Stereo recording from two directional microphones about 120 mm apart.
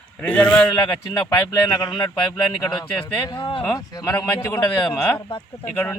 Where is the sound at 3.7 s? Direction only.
30° left (ahead or behind).